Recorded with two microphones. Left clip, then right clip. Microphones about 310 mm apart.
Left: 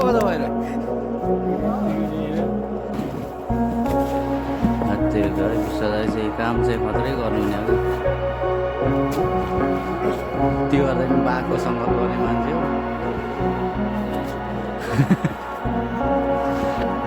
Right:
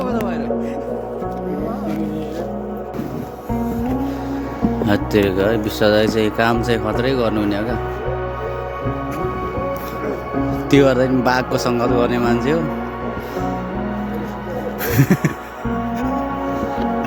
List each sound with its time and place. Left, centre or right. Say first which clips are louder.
0.0 s music: left 4 dB; left
4.9 s speech: right 6 dB; centre
10.7 s speech: right 6 dB; centre